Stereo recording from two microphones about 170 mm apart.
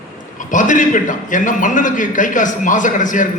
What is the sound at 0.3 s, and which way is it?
A man's voice, 50° left (ahead or behind).